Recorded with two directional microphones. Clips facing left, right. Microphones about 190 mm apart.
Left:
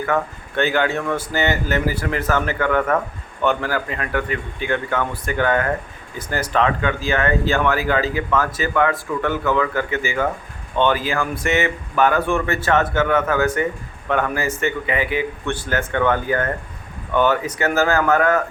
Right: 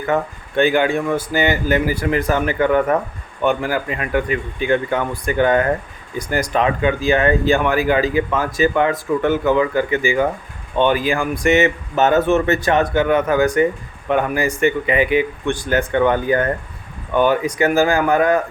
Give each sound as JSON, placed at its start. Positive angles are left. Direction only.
{"t": 0.1, "sound": "speech", "side_deg": -15}